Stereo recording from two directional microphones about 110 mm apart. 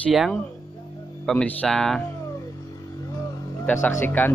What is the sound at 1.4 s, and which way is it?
Speech, 5° left (ahead or behind).